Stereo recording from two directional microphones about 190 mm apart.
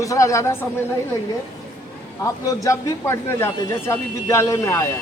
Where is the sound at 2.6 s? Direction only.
15° left (ahead or behind).